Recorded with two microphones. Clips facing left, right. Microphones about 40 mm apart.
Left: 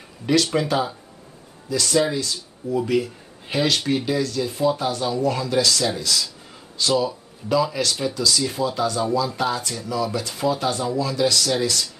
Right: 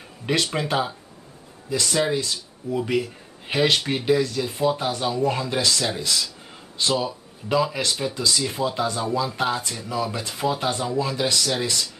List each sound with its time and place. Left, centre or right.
0.6 s speech: right
1.7 s speech: centre
2.1 s speech: right
11.3 s speech: centre